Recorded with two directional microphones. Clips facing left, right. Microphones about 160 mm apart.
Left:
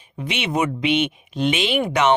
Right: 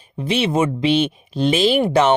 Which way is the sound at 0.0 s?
30° right (ahead or behind).